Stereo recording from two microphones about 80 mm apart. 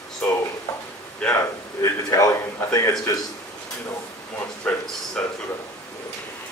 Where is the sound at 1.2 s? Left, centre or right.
Centre.